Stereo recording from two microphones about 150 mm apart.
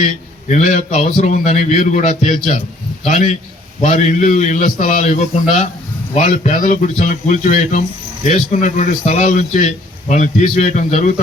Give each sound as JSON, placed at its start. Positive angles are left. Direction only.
{"t": 0.0, "sound": "speech", "side_deg": 55}
{"t": 3.9, "sound": "speech", "side_deg": 55}